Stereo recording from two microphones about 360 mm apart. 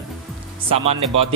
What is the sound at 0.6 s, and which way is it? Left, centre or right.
Speech, centre.